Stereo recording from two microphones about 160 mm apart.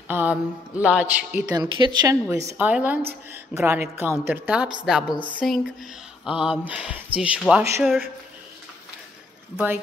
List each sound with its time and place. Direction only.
0.1 s speech: 10° right (ahead or behind)
1.5 s speech: 25° right (ahead or behind)
2.2 s a woman's voice: 15° right (ahead or behind)